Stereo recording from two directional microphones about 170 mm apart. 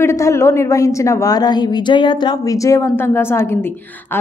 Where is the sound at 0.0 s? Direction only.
15° left (ahead or behind).